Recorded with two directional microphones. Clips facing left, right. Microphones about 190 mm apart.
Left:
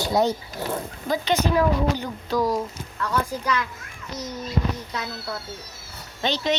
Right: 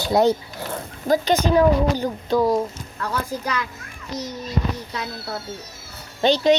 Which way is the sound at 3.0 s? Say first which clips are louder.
Even; 40° right (ahead or behind).